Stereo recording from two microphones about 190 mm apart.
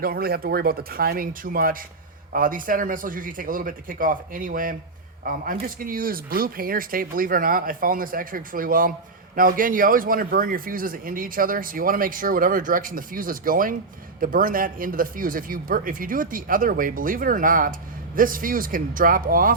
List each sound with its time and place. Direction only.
0.0 s speech: 50° right (ahead or behind)